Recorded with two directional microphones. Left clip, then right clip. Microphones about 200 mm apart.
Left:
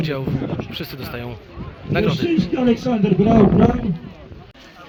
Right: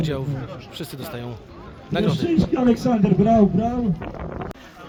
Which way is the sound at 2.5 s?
20° right (ahead or behind).